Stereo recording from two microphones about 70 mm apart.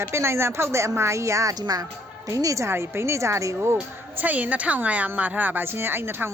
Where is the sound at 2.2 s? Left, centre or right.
Right.